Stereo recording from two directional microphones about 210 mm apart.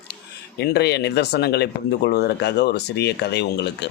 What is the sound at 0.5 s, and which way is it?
Speech, 50° left (ahead or behind).